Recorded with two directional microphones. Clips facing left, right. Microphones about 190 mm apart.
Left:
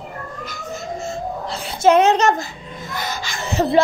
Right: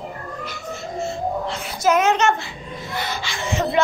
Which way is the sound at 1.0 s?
35° left (ahead or behind).